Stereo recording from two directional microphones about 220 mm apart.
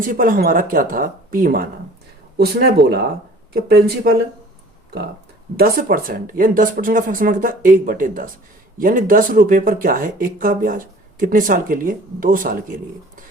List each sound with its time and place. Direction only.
0.0 s speech: 40° right (ahead or behind)
5.5 s speech: 40° right (ahead or behind)